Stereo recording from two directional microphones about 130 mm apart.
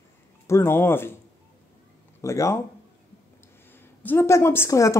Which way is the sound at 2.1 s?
25° left (ahead or behind).